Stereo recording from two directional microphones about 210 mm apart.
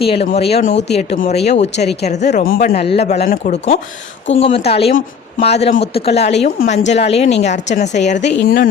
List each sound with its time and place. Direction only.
0.0 s a woman's voice: 25° left (ahead or behind); by 2.7 s 45° left (ahead or behind)
2.9 s a woman's voice: 30° left (ahead or behind)